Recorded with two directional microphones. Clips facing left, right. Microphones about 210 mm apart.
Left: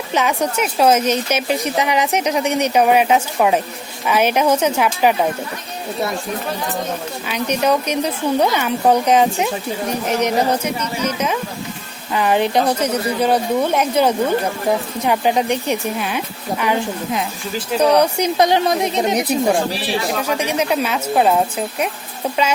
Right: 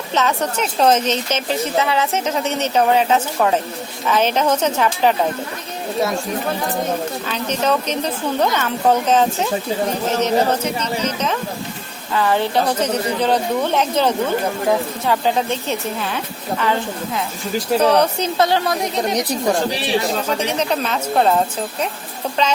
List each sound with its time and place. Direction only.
0.1 s a woman's voice: 10° left (ahead or behind)
7.3 s a woman's voice: 15° left (ahead or behind)
19.1 s a woman's voice: 10° left (ahead or behind)